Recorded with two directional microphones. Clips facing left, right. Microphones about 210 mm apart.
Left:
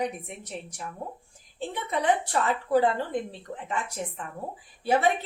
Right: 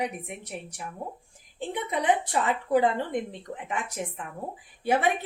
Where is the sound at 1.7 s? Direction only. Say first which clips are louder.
Even; 15° right (ahead or behind).